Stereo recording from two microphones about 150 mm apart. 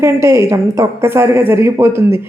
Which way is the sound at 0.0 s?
20° right (ahead or behind).